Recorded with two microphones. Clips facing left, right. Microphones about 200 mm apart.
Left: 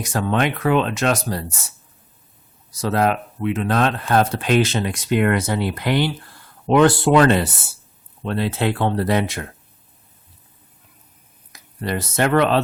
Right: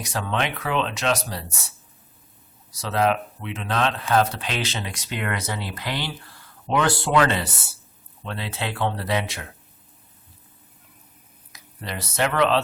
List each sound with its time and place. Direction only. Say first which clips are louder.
0.0 s speech: left 6 dB; 50° left (ahead or behind)
2.8 s speech: left 3 dB; 50° left (ahead or behind)
11.5 s speech: left 9 dB; 50° left (ahead or behind)